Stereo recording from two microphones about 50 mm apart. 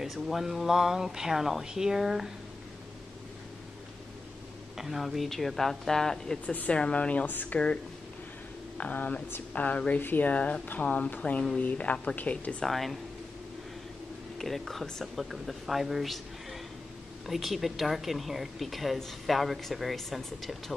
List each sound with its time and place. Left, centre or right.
0.0 s speech: centre
4.7 s speech: centre
6.4 s speech: left
6.7 s speech: left
7.2 s speech: left
7.5 s speech: left
8.7 s speech: left
12.6 s speech: centre
14.4 s speech: centre
17.3 s speech: centre